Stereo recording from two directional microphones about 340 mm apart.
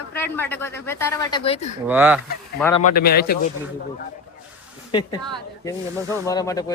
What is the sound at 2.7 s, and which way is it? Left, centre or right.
Speech, left.